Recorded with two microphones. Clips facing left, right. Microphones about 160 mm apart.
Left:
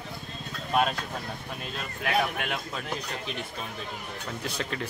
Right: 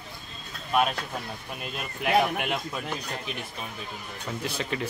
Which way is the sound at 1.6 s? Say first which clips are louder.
Right 1 dB; 15° right (ahead or behind).